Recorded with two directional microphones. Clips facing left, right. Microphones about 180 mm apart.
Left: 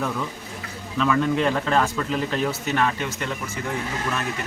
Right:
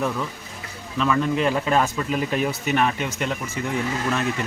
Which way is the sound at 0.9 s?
Centre (ahead or behind).